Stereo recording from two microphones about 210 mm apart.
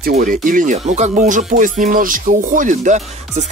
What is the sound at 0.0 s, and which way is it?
Speech, 40° right (ahead or behind).